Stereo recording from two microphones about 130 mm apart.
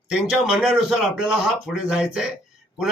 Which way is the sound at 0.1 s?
5° right (ahead or behind).